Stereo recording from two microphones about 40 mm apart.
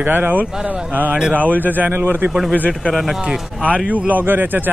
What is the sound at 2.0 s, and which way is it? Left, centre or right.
Speech, right.